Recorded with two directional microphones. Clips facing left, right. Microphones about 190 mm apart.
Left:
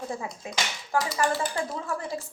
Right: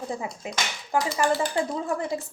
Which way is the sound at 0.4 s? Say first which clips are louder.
Right 1 dB; 20° right (ahead or behind).